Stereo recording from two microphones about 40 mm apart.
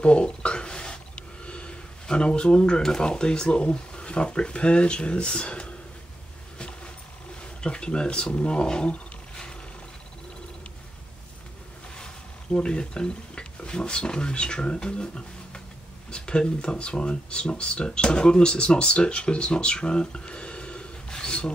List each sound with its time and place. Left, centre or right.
0.0 s a sound: left
3.6 s speech: left
7.6 s speech: left
12.5 s speech: left